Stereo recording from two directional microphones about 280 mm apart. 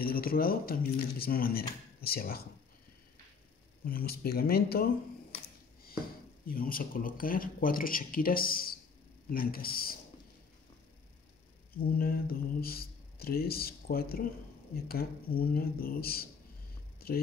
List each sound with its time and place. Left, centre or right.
0.0 s speech: left
3.8 s speech: left
6.4 s speech: left
12.0 s speech: left